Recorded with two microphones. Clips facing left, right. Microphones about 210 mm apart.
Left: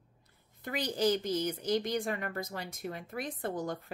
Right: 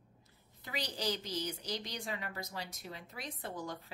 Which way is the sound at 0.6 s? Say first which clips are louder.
Left 8 dB; 50° left (ahead or behind).